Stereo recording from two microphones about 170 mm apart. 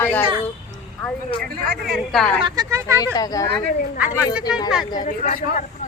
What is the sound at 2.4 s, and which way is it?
Speech, 20° right (ahead or behind).